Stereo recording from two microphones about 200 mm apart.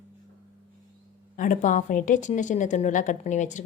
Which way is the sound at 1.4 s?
40° left (ahead or behind).